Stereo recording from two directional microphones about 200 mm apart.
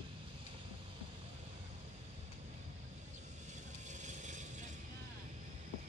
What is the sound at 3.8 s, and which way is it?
Vehicle, 35° right (ahead or behind).